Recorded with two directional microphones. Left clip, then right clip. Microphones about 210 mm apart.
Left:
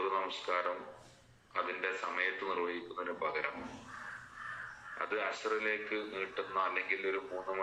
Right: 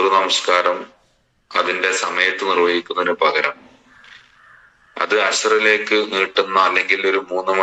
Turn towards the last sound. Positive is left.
turn(degrees=-55)  # may be behind; listen again after turning